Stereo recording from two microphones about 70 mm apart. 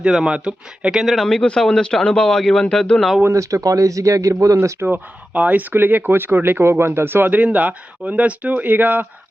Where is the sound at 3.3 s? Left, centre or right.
Right.